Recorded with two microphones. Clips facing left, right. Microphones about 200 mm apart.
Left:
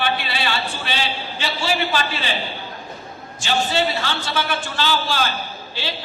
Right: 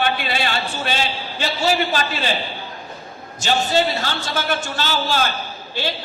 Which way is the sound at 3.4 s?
40° right (ahead or behind).